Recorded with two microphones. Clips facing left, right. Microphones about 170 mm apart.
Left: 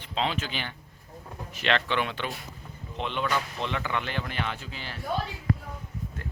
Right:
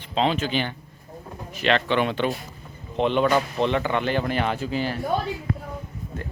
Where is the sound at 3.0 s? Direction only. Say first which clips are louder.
Right 9 dB; 35° right (ahead or behind).